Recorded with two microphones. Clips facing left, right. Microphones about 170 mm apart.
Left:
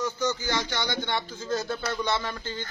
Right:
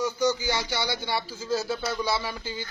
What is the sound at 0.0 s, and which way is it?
A man's voice, 10° right (ahead or behind).